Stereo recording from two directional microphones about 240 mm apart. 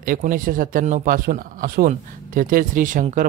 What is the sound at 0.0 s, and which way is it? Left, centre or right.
Speech, right.